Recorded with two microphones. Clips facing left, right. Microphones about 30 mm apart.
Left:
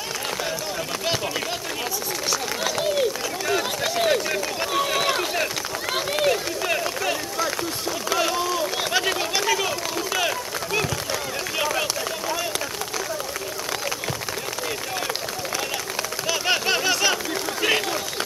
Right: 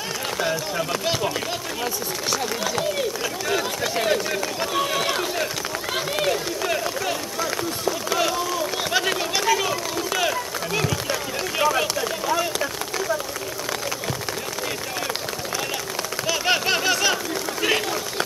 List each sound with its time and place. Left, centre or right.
0.4 s a man's voice: centre
3.4 s run: centre
8.1 s speech: centre
8.9 s run: centre
16.3 s a sound: centre